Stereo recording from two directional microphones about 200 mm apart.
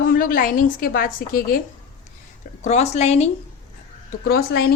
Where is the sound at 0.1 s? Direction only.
45° left (ahead or behind).